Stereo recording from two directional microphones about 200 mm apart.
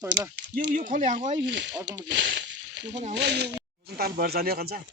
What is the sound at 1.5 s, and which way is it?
Speech, 65° right (ahead or behind).